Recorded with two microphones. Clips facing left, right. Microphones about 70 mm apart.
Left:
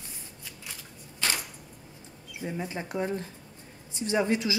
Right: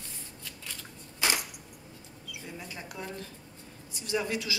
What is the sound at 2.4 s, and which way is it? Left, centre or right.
Speech, left.